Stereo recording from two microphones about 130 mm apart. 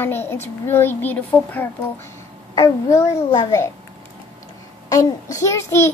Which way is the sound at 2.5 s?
25° left (ahead or behind).